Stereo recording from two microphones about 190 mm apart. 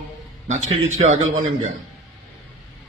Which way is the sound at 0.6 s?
90° right.